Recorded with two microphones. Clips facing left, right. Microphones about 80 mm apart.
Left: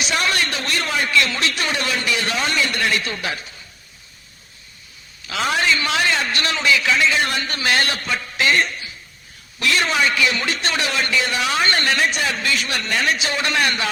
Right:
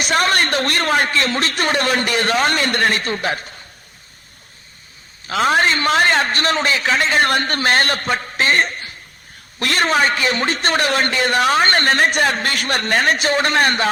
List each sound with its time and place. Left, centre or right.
0.0 s a man's voice: right
5.2 s a man's voice: right